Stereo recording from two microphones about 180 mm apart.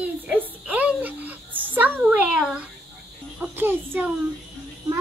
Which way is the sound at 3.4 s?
10° right (ahead or behind).